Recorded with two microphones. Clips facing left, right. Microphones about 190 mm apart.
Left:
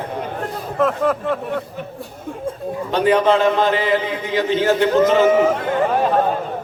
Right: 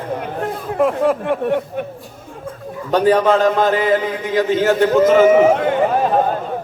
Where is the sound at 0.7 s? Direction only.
10° right (ahead or behind).